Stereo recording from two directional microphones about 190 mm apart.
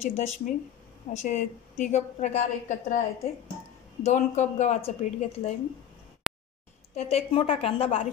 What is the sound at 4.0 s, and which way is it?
A woman's voice, 35° left (ahead or behind).